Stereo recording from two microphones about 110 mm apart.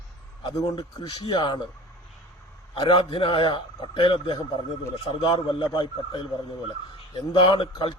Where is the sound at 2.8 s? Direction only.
55° left (ahead or behind).